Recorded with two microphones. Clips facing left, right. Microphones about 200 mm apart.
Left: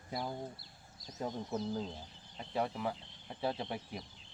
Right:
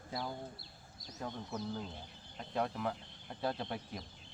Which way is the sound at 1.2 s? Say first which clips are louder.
Left 4 dB; 20° left (ahead or behind).